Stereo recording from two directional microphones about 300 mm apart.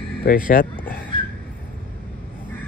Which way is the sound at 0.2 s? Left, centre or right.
Left.